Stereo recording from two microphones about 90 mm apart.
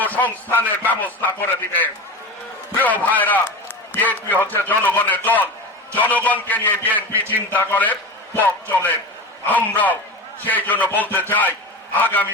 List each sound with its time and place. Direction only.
0.0 s a man's voice: 20° left (ahead or behind)
9.5 s a man's voice: 20° left (ahead or behind)